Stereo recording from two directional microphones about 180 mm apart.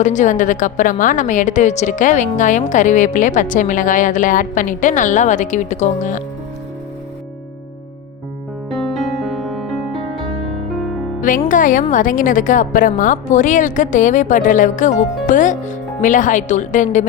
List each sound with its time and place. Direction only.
0.0 s a woman's voice: 45° left (ahead or behind)
8.7 s music: centre (ahead or behind)
11.4 s a woman's voice: 45° left (ahead or behind)